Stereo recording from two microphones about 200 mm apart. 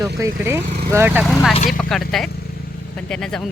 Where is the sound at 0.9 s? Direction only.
10° right (ahead or behind).